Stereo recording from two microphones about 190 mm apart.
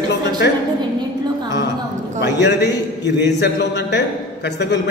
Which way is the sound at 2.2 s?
65° left (ahead or behind).